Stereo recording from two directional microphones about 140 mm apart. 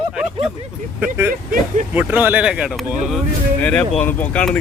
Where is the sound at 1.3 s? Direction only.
70° right (ahead or behind).